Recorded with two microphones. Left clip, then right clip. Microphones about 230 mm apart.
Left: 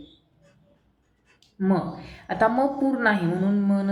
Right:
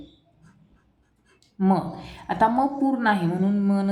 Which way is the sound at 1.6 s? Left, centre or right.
Right.